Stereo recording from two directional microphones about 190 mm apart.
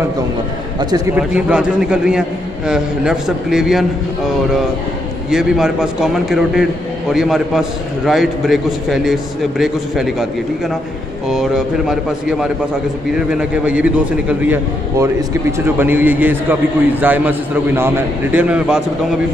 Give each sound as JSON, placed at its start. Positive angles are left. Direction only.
{"t": 0.7, "sound": "a man's voice", "side_deg": -20}
{"t": 1.1, "sound": "a man's voice", "side_deg": -5}
{"t": 5.3, "sound": "a man's voice", "side_deg": -5}
{"t": 11.2, "sound": "a man's voice", "side_deg": -5}
{"t": 15.6, "sound": "a man's voice", "side_deg": -10}